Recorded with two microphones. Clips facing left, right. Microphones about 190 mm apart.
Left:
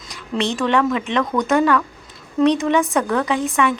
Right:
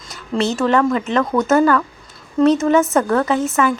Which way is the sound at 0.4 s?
5° right (ahead or behind).